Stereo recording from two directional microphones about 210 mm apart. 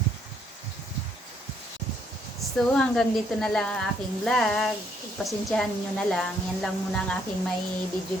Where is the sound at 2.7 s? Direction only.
5° left (ahead or behind).